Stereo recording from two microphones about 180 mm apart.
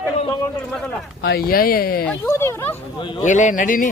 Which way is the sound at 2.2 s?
10° left (ahead or behind).